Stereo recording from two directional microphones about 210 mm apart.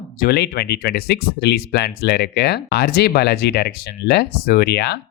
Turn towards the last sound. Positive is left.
turn(degrees=50)  # may be behind; listen again after turning